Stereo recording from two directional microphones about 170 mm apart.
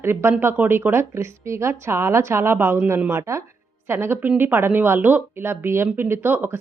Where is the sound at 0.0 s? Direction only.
15° right (ahead or behind).